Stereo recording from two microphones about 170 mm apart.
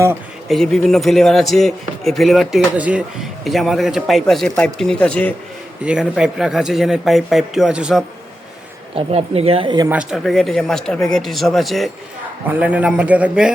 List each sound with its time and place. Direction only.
0.4 s speech: centre (ahead or behind)
5.8 s speech: 5° right (ahead or behind)
9.0 s speech: 35° right (ahead or behind)
9.9 s a man's voice: 5° right (ahead or behind)